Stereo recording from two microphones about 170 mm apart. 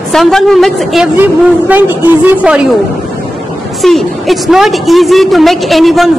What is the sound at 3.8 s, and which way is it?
A woman's voice, centre (ahead or behind).